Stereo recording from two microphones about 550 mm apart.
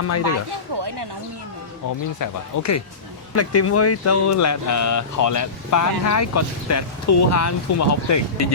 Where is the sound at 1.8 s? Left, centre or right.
Left.